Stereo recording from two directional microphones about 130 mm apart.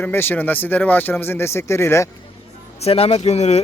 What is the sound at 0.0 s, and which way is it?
Speech, 15° left (ahead or behind).